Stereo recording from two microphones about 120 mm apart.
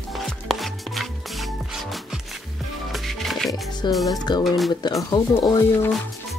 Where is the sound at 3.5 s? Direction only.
30° left (ahead or behind).